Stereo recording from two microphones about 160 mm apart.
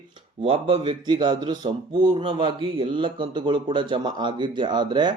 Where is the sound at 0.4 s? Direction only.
35° right (ahead or behind).